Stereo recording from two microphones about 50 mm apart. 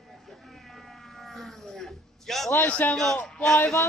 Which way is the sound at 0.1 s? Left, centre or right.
Centre.